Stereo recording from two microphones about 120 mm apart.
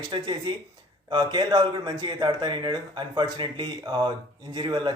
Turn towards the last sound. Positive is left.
turn(degrees=-40)  # may be behind; listen again after turning